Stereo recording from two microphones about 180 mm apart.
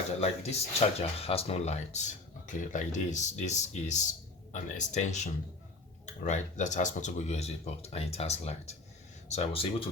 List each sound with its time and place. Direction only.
0.2 s speech: 35° left (ahead or behind)